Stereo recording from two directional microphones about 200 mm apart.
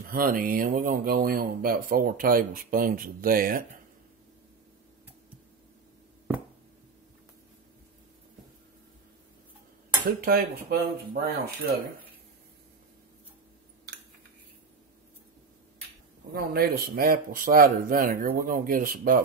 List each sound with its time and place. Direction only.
0.1 s speech: 45° right (ahead or behind)
10.0 s speech: 50° right (ahead or behind)
16.3 s speech: 50° right (ahead or behind)